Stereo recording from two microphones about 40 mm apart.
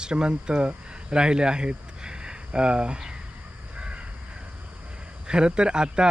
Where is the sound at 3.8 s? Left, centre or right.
Right.